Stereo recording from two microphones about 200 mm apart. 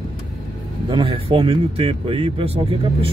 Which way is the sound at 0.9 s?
25° right (ahead or behind).